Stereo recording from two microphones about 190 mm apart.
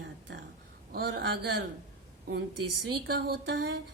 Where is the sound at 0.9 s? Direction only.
65° right (ahead or behind).